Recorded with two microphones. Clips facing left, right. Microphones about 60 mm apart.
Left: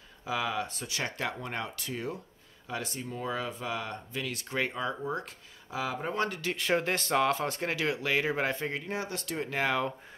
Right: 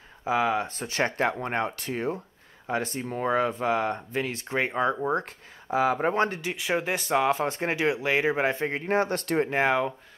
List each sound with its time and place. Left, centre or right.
0.2 s speech: right
4.7 s speech: right
6.1 s speech: right
6.4 s speech: centre; by 8.8 s right
8.8 s speech: right
9.5 s speech: right